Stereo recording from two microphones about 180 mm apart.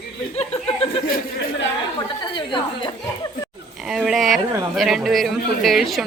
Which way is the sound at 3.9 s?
Centre (ahead or behind).